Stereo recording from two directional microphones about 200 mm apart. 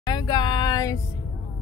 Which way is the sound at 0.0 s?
20° left (ahead or behind).